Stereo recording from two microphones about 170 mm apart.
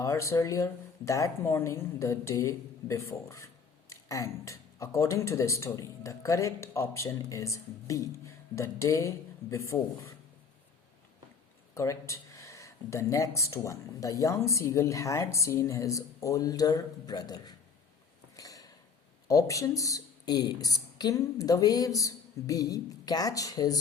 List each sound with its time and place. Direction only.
0.0 s speech: 15° left (ahead or behind)
11.7 s speech: 15° left (ahead or behind)
18.3 s a sound: 20° left (ahead or behind)
19.3 s speech: 20° left (ahead or behind)